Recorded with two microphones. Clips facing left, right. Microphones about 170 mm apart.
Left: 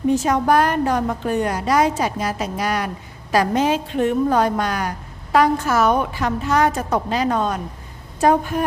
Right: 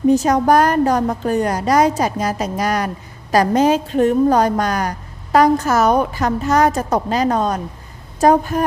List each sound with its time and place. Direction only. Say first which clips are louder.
0.1 s a woman's voice: right 3 dB; 40° right (ahead or behind)